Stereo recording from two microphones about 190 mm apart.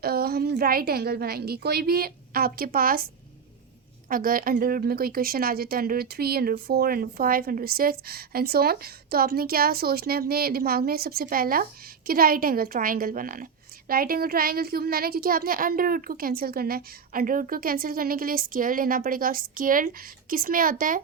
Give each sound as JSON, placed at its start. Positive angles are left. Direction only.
{"t": 0.0, "sound": "a woman's voice", "side_deg": -55}
{"t": 4.1, "sound": "a woman's voice", "side_deg": -50}